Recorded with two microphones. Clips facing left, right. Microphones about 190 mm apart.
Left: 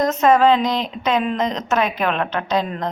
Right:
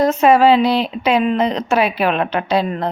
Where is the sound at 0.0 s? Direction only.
10° right (ahead or behind).